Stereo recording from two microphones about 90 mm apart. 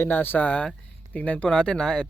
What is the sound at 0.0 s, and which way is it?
Speech, 25° left (ahead or behind).